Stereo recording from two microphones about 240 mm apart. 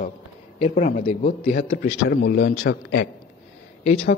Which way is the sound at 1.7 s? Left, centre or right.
Left.